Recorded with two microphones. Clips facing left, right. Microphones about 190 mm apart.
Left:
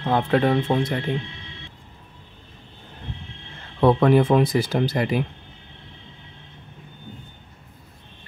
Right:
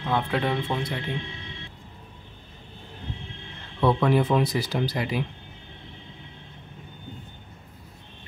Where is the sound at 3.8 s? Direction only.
50° left (ahead or behind).